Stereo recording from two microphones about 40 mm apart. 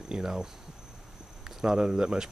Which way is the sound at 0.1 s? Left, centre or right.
Centre.